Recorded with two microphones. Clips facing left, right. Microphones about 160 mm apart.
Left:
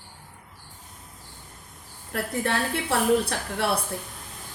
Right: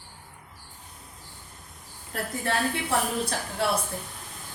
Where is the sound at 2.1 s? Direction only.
70° left (ahead or behind).